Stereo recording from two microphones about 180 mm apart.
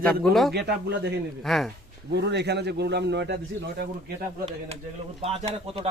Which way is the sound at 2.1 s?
70° right (ahead or behind).